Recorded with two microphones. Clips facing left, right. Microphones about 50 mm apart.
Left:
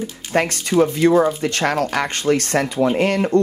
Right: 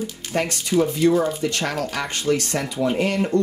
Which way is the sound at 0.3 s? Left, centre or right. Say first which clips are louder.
Left 4 dB; left.